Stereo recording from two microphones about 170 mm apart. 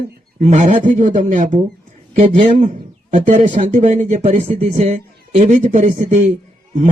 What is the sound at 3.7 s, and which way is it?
Speech, 45° right (ahead or behind).